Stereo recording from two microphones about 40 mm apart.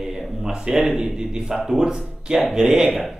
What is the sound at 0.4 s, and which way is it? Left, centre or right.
A man's voice, centre.